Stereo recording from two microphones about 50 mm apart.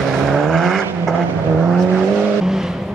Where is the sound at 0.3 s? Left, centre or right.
Centre.